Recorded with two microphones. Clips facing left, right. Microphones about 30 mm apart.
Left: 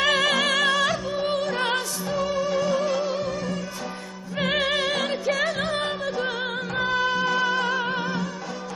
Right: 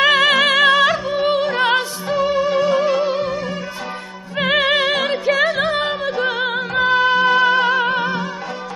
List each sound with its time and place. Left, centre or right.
0.0 s music: right